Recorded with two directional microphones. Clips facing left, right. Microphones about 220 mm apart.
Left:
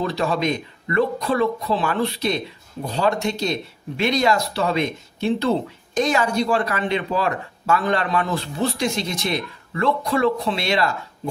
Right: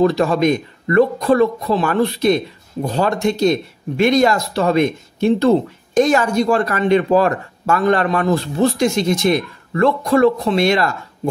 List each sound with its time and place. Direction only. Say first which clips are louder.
0.0 s speech: right 8 dB; 45° right (ahead or behind)